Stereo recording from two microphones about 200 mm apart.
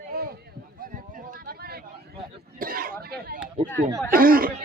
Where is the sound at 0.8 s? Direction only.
45° right (ahead or behind).